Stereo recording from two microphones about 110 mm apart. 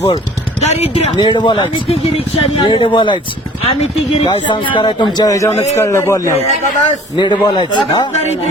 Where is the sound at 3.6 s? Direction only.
60° left (ahead or behind); by 6.3 s 25° left (ahead or behind).